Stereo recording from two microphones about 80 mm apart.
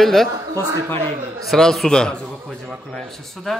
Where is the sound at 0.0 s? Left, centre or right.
Centre.